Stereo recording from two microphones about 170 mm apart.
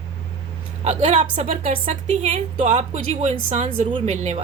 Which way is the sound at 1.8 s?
40° right (ahead or behind).